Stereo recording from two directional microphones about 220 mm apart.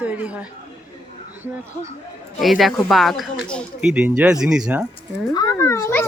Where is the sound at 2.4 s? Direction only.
Centre (ahead or behind).